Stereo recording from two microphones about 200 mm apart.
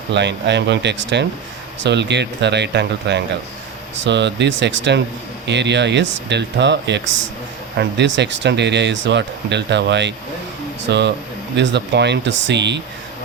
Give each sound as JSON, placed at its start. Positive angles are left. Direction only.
{"t": 0.1, "sound": "speech", "side_deg": -60}